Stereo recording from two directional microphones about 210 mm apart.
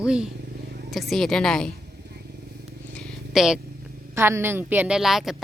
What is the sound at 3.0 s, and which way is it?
Purr, centre (ahead or behind).